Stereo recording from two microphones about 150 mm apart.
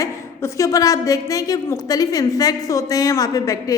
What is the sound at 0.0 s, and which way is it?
A woman's voice, 20° left (ahead or behind).